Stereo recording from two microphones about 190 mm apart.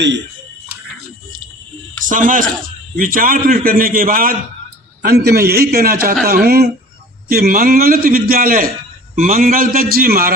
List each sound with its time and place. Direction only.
2.0 s a man's voice: 45° right (ahead or behind)